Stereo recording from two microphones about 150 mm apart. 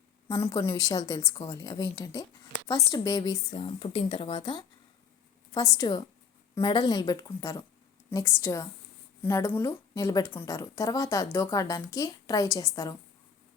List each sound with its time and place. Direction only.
0.3 s a woman's voice: 20° left (ahead or behind); by 4.6 s 35° left (ahead or behind)
5.5 s a woman's voice: 25° left (ahead or behind)